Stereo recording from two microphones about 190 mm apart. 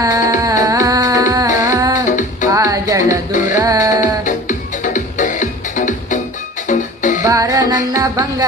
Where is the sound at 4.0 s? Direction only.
40° left (ahead or behind).